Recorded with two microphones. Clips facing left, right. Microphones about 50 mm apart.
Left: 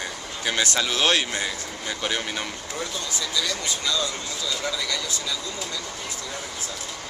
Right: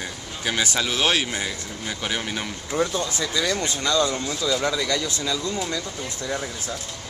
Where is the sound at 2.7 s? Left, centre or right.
Right.